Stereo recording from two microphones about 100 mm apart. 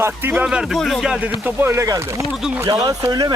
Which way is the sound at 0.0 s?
20° right (ahead or behind).